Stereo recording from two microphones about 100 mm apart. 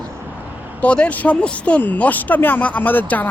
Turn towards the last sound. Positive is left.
turn(degrees=15)  # may be behind; listen again after turning